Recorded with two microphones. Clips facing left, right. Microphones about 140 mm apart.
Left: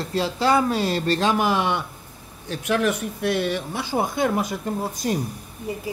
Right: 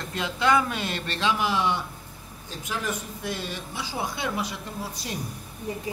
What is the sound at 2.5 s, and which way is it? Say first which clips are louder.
Speech: left 9 dB; 70° left (ahead or behind).